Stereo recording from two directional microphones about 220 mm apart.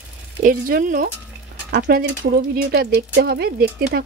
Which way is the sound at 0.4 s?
40° right (ahead or behind).